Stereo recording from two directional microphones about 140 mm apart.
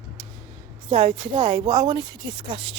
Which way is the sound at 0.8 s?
40° right (ahead or behind).